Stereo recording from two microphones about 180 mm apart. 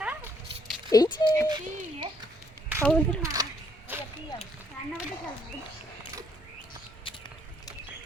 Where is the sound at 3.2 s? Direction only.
20° right (ahead or behind).